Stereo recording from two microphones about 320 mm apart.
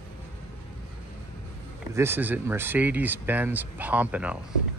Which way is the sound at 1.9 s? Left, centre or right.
Centre.